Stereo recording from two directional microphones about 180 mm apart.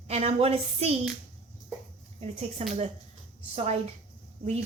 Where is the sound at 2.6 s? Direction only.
35° right (ahead or behind).